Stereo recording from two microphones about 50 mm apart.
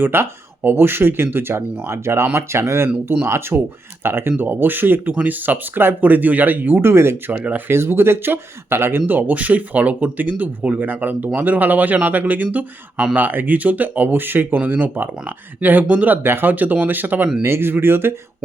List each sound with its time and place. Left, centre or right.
0.0 s speech: right
1.9 s speech: right
4.0 s speech: right
6.9 s speech: right
7.3 s speech: right
7.7 s speech: right
9.0 s speech: right
16.2 s speech: right
17.4 s speech: right